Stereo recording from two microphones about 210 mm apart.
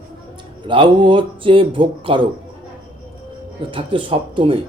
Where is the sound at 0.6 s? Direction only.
25° right (ahead or behind).